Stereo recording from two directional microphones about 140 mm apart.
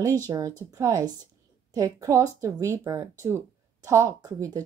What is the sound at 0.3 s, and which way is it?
Speech, 25° right (ahead or behind).